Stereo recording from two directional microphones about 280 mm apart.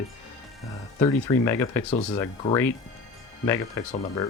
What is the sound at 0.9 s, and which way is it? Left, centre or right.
Speech, centre.